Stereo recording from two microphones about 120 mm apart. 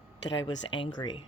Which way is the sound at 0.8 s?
40° left (ahead or behind).